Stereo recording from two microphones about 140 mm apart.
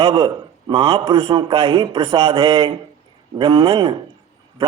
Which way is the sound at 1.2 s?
30° right (ahead or behind).